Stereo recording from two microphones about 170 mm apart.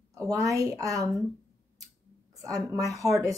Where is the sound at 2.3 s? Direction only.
20° right (ahead or behind).